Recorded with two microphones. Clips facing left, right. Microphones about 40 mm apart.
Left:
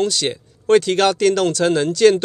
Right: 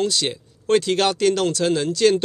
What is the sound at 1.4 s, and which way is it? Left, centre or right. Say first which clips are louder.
Speech: left 3 dB; left.